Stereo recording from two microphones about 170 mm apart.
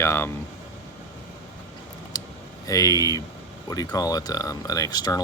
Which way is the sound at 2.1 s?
20° left (ahead or behind).